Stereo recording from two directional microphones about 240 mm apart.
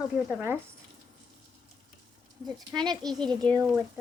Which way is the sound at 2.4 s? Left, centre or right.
Centre.